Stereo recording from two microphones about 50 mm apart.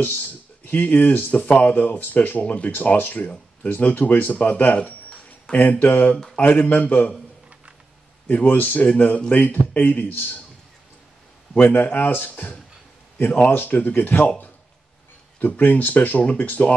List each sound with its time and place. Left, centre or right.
0.7 s speech: left
8.3 s speech: left
11.6 s speech: left
15.3 s speech: left